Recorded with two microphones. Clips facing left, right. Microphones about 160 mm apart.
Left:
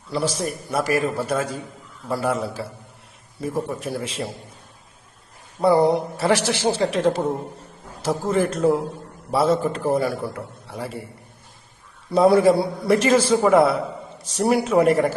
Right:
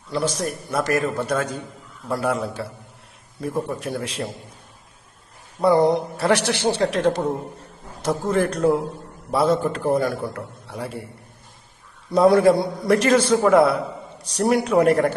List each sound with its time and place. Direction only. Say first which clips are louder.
0.1 s a man's voice: even; 5° left (ahead or behind)
5.5 s a man's voice: even; 5° left (ahead or behind)
12.1 s a man's voice: even; centre (ahead or behind)